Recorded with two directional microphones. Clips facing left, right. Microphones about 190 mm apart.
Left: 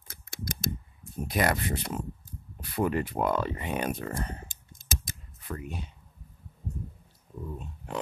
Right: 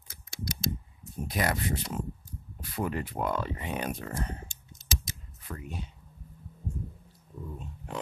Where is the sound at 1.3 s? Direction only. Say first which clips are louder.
Left 3 dB; 60° left (ahead or behind).